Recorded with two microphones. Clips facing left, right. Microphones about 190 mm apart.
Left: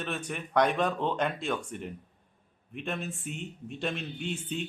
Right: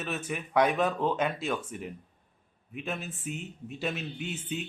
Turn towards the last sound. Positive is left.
turn(degrees=-5)  # may be behind; listen again after turning